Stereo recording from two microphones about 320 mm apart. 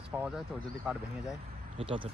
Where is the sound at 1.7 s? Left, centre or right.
Centre.